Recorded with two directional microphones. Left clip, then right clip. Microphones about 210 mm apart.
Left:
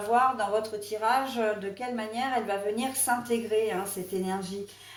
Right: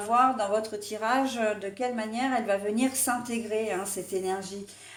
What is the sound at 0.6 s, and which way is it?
Speech, 45° right (ahead or behind).